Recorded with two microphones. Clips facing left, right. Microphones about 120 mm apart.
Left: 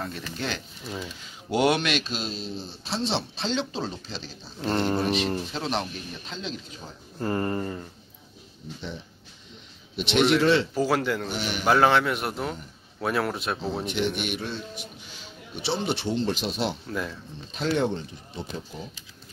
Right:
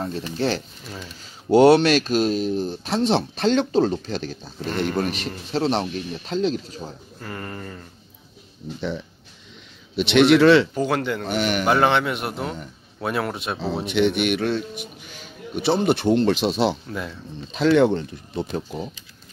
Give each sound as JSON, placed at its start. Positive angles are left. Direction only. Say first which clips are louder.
{"t": 0.0, "sound": "speech", "louder": "right 8 dB", "side_deg": -30}
{"t": 0.8, "sound": "speech", "louder": "left 2 dB", "side_deg": 15}
{"t": 1.5, "sound": "speech", "louder": "right 9 dB", "side_deg": -35}
{"t": 4.6, "sound": "speech", "louder": "even", "side_deg": 35}
{"t": 4.9, "sound": "speech", "louder": "even", "side_deg": -50}
{"t": 5.5, "sound": "speech", "louder": "right 7 dB", "side_deg": -35}
{"t": 7.2, "sound": "speech", "louder": "left 8 dB", "side_deg": 30}
{"t": 9.9, "sound": "speech", "louder": "right 6 dB", "side_deg": -75}
{"t": 10.7, "sound": "speech", "louder": "right 1 dB", "side_deg": 5}
{"t": 11.2, "sound": "a man's voice", "louder": "right 8 dB", "side_deg": -60}
{"t": 11.6, "sound": "speech", "louder": "left 1 dB", "side_deg": 0}
{"t": 13.8, "sound": "a man's voice", "louder": "right 10 dB", "side_deg": -75}